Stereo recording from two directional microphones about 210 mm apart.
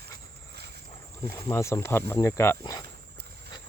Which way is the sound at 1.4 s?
15° left (ahead or behind).